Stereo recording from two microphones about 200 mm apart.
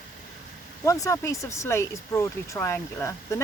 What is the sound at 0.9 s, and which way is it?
Speech, 15° left (ahead or behind).